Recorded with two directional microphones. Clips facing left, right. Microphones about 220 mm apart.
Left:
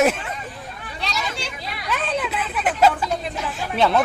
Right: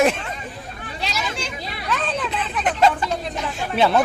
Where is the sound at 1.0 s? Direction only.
Centre (ahead or behind).